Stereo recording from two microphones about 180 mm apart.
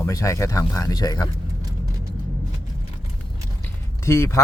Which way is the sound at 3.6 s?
15° left (ahead or behind).